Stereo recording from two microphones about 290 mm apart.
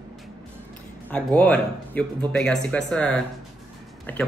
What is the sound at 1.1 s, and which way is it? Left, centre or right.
Speech, centre.